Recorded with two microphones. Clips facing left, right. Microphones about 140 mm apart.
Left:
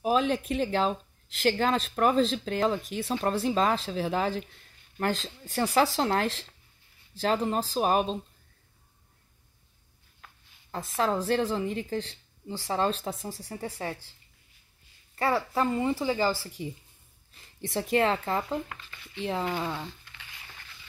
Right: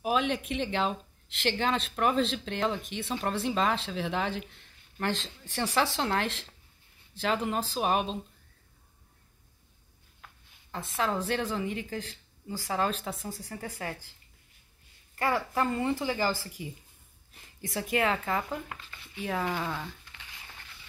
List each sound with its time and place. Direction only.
0.0 s a sound: 35° left (ahead or behind)
0.5 s speech: 40° left (ahead or behind)
10.7 s speech: 40° left (ahead or behind)
13.4 s a woman's voice: 20° left (ahead or behind)
15.1 s a woman's voice: 30° left (ahead or behind)
17.6 s a woman's voice: 30° left (ahead or behind)